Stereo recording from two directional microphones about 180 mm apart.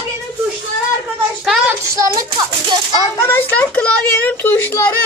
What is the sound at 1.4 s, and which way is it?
Speech, 5° right (ahead or behind).